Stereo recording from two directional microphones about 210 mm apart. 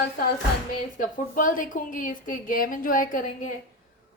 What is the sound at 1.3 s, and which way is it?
A woman's voice, 40° left (ahead or behind).